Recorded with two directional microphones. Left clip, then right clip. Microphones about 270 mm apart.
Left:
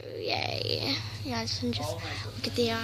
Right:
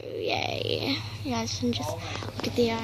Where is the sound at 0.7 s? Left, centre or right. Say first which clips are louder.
Right 2 dB; centre.